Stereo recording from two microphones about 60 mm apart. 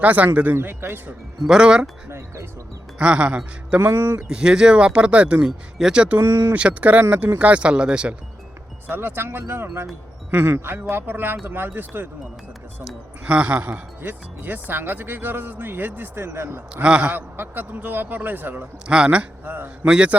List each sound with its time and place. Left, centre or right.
0.0 s a man's voice: right
0.5 s speech: right
1.5 s speech: centre
2.0 s speech: right
3.0 s speech: centre
3.8 s speech: right
4.3 s speech: centre
6.1 s speech: right
6.5 s a man's voice: right
8.9 s speech: right
13.2 s speech: centre; by 16.6 s right
16.7 s a man's voice: centre; by 18.7 s right
18.9 s speech: centre
19.5 s a man's voice: right